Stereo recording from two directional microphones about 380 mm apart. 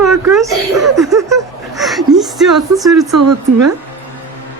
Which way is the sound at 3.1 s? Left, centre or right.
Right.